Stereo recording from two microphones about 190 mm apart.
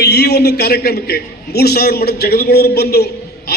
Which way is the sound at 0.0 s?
60° left (ahead or behind).